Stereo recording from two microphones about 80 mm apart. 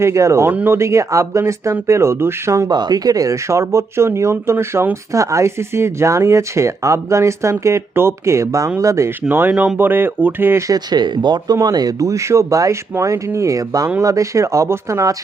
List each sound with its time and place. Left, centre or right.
0.0 s speech: right
0.5 s speech: right
0.8 s speech: right
2.6 s speech: right
9.3 s speech: centre
9.7 s speech: right
10.7 s speech: right
11.6 s speech: right